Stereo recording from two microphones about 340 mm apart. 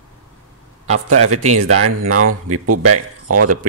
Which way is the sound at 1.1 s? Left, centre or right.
Right.